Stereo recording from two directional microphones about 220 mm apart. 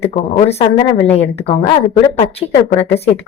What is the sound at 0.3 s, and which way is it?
A woman's voice, 30° left (ahead or behind).